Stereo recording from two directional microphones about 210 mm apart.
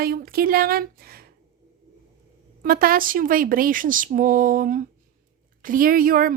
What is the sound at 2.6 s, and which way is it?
A woman's voice, 45° right (ahead or behind).